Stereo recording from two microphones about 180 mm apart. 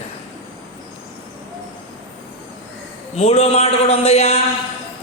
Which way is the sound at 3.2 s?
35° left (ahead or behind).